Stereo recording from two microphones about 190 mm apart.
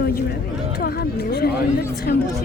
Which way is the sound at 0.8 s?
55° left (ahead or behind).